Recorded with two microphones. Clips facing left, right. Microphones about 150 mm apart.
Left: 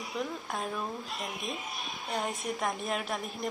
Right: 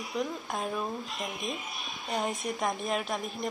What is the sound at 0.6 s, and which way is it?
Speech, centre (ahead or behind).